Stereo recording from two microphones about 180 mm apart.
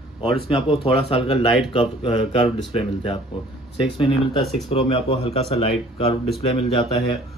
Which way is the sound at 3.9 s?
30° left (ahead or behind).